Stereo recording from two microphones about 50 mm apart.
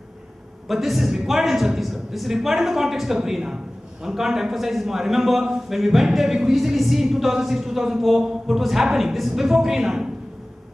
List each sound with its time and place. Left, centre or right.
0.7 s a man's voice: centre